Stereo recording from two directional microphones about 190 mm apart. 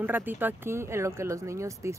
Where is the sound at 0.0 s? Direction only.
10° right (ahead or behind).